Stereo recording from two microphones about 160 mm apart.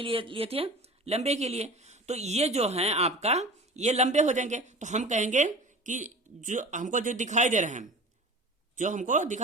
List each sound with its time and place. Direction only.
0.0 s speech: 35° right (ahead or behind); by 9.4 s 50° right (ahead or behind)